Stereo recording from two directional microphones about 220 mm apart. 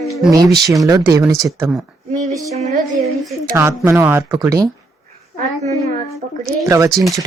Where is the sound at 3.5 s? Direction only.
10° right (ahead or behind).